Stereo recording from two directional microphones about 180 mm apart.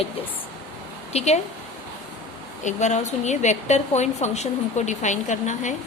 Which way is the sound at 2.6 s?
40° left (ahead or behind).